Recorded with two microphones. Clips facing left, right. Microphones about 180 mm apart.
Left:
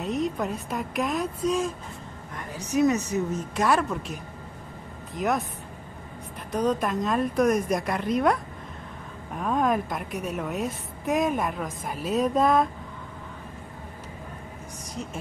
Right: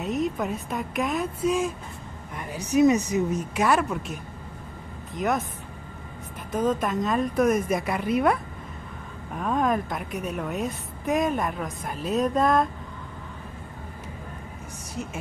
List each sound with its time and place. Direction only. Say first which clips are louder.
0.0 s a woman's voice: right 1 dB; centre (ahead or behind)
2.3 s a woman's voice: right 3 dB; 15° right (ahead or behind); by 5.4 s centre (ahead or behind)
6.5 s a woman's voice: even; centre (ahead or behind)